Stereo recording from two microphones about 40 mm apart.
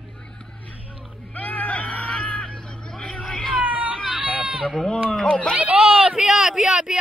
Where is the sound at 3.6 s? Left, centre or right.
Right.